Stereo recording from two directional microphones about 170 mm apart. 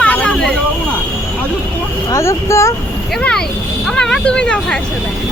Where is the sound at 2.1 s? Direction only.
15° left (ahead or behind).